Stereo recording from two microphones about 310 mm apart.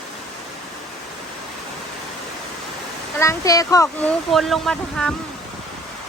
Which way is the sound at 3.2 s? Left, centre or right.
Centre.